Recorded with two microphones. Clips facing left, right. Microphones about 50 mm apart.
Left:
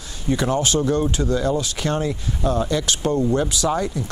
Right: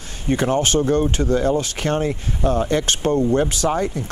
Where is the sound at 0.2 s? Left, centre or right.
Right.